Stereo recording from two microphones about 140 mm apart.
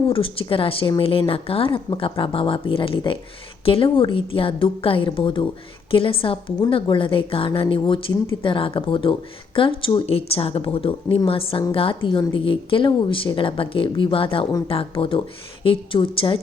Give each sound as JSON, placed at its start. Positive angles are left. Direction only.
{"t": 0.1, "sound": "a woman's voice", "side_deg": 40}